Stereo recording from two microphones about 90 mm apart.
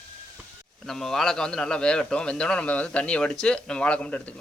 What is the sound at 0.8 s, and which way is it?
A man's voice, 5° left (ahead or behind).